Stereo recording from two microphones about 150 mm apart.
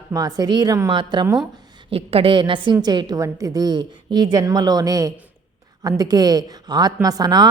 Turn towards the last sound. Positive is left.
turn(degrees=-25)  # may be behind; listen again after turning